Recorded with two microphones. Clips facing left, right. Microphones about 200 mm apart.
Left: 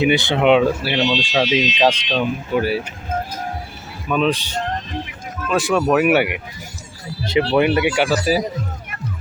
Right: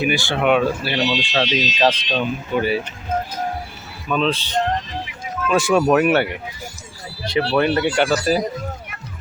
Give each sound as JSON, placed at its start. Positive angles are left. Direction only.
{"t": 0.0, "sound": "speech", "side_deg": 20}
{"t": 1.0, "sound": "speech", "side_deg": -10}
{"t": 1.3, "sound": "speech", "side_deg": 10}
{"t": 4.1, "sound": "speech", "side_deg": 10}
{"t": 5.5, "sound": "speech", "side_deg": 0}